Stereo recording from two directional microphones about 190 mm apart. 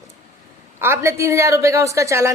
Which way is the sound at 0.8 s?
15° right (ahead or behind).